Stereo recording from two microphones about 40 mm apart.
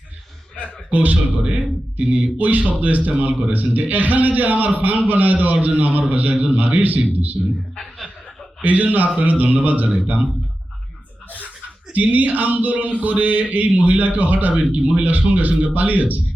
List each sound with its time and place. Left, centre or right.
0.9 s a man's voice: right
7.8 s chuckle: centre
8.6 s a man's voice: right
11.9 s a man's voice: right
14.5 s a man's voice: right